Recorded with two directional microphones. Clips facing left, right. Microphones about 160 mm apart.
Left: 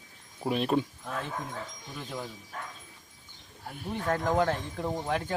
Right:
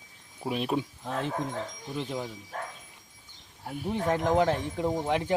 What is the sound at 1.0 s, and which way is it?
Speech, 30° right (ahead or behind).